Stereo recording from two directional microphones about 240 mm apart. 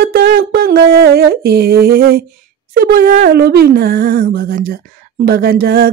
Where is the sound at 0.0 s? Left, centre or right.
Right.